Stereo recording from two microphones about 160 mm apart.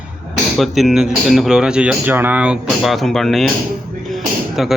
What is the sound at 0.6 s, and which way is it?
A man's voice, centre (ahead or behind).